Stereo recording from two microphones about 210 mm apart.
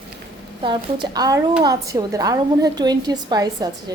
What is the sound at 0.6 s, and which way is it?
A woman's voice, 20° right (ahead or behind).